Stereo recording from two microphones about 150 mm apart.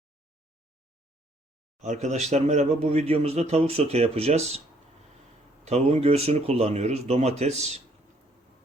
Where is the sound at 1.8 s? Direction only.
50° right (ahead or behind).